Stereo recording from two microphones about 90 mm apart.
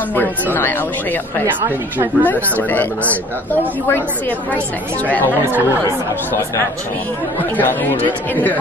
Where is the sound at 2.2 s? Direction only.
20° left (ahead or behind).